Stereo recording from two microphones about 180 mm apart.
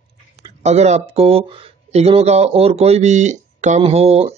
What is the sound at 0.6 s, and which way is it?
Speech, 40° right (ahead or behind).